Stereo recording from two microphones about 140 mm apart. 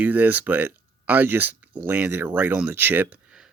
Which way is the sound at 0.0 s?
10° right (ahead or behind).